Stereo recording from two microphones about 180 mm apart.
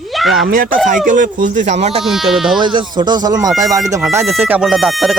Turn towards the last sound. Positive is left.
turn(degrees=0)  # may be behind; listen again after turning